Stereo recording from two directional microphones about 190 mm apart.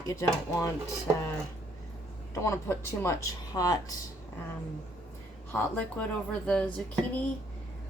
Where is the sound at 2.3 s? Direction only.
15° left (ahead or behind).